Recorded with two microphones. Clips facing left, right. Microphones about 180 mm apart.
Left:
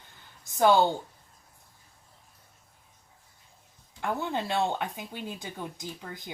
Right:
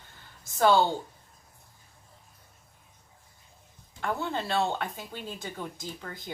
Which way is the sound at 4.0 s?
15° left (ahead or behind).